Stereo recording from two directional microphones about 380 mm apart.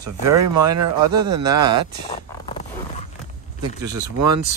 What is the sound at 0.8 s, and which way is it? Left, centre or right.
Speech, right.